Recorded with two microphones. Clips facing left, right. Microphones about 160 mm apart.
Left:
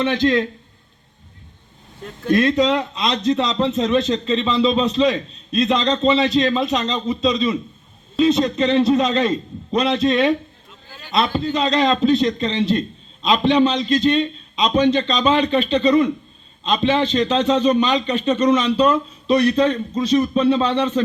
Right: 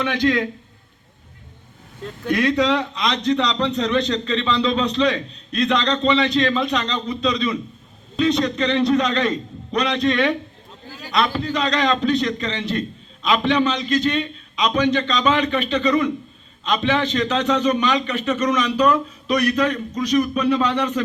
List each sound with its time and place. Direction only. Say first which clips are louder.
0.0 s a man's voice: left 2 dB; 25° left (ahead or behind)
2.3 s a man's voice: left 2 dB; 20° left (ahead or behind)